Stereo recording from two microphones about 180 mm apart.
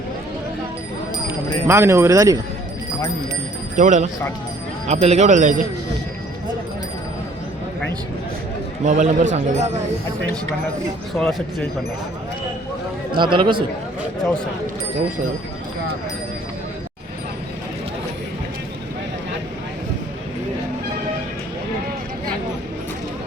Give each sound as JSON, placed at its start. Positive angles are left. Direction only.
{"t": 1.6, "sound": "speech", "side_deg": -15}
{"t": 3.8, "sound": "a man's voice", "side_deg": -45}
{"t": 8.8, "sound": "a man's voice", "side_deg": -40}
{"t": 11.1, "sound": "speech", "side_deg": 0}
{"t": 13.1, "sound": "speech", "side_deg": -25}